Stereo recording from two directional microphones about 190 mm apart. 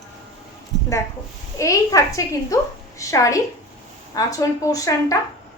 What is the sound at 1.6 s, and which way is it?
A woman's voice, 15° left (ahead or behind).